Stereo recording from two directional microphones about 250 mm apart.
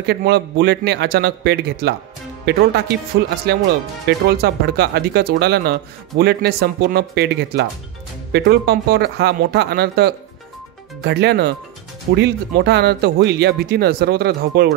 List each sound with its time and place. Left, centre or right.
0.0 s speech: right